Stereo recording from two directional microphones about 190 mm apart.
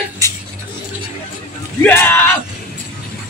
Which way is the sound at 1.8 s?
10° left (ahead or behind).